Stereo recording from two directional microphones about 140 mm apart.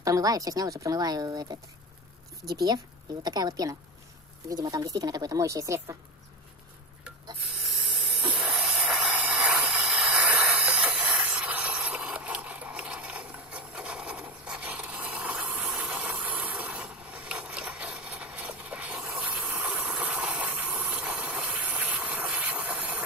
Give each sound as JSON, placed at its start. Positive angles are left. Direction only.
{"t": 0.0, "sound": "a woman's voice", "side_deg": -25}
{"t": 8.3, "sound": "hiss", "side_deg": -5}